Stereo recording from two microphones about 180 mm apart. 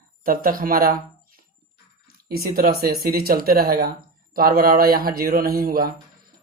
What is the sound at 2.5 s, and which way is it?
Speech, 55° right (ahead or behind).